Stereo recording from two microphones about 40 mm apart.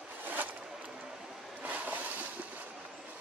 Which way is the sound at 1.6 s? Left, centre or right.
Right.